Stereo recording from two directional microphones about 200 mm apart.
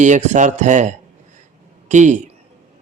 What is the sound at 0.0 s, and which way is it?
A man's voice, 35° right (ahead or behind).